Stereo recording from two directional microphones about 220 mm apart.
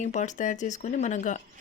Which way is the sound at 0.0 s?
35° left (ahead or behind).